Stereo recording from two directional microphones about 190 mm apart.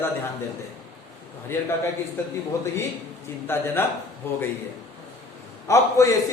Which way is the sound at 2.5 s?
15° left (ahead or behind).